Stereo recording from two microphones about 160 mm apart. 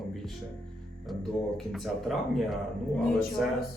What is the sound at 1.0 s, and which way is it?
Speech, centre (ahead or behind).